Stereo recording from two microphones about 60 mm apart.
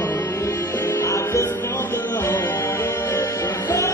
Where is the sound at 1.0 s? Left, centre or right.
Left.